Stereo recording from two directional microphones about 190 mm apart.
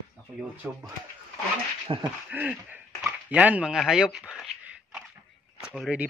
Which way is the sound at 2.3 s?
10° right (ahead or behind).